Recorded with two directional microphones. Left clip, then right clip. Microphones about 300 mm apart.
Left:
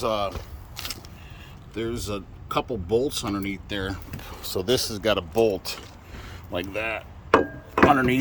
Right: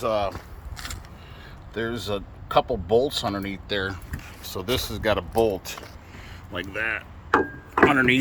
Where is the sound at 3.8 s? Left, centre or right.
Centre.